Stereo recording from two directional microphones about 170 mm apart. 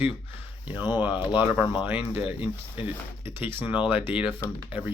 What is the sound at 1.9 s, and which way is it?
Speech, 35° left (ahead or behind).